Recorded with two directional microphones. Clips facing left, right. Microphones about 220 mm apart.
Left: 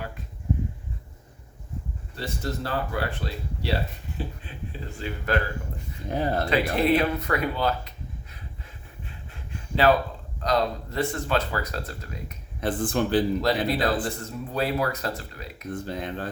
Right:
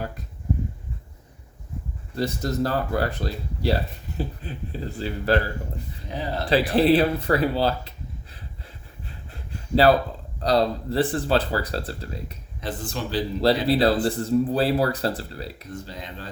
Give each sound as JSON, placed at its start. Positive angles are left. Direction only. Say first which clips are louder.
{"t": 2.1, "sound": "speech", "louder": "right 7 dB", "side_deg": -40}
{"t": 6.1, "sound": "speech", "louder": "left 4 dB", "side_deg": 50}
{"t": 6.5, "sound": "speech", "louder": "right 5 dB", "side_deg": -30}
{"t": 9.0, "sound": "a sound", "louder": "right 3 dB", "side_deg": -35}
{"t": 10.4, "sound": "speech", "louder": "right 4 dB", "side_deg": -35}
{"t": 12.5, "sound": "speech", "louder": "left 6 dB", "side_deg": 55}
{"t": 13.4, "sound": "speech", "louder": "right 5 dB", "side_deg": -30}
{"t": 15.7, "sound": "speech", "louder": "left 5 dB", "side_deg": 55}